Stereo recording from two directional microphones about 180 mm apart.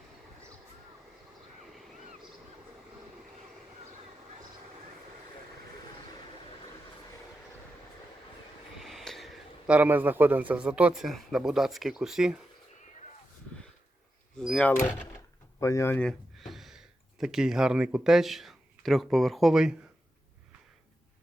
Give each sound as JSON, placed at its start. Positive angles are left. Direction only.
{"t": 8.8, "sound": "a man's voice", "side_deg": 0}
{"t": 14.3, "sound": "power windows", "side_deg": 5}
{"t": 15.6, "sound": "speech", "side_deg": 15}